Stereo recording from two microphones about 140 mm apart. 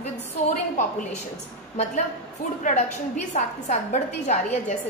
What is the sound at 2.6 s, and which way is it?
A woman's voice, 60° left (ahead or behind).